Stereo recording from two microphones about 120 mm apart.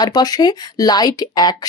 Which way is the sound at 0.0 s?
35° left (ahead or behind).